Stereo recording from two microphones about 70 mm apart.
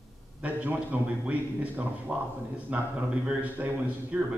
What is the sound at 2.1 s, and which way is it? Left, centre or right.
A man's voice, centre.